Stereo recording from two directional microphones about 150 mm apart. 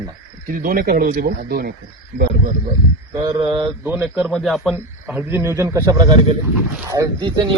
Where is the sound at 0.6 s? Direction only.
70° right (ahead or behind).